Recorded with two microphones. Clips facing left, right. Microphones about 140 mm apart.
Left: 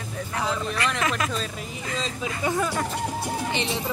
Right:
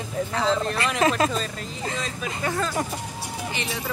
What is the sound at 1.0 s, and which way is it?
Speech, 30° right (ahead or behind).